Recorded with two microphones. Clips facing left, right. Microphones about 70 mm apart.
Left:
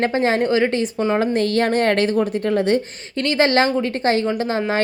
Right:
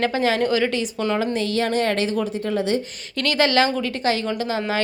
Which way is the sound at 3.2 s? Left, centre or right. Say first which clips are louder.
Left 2 dB; left.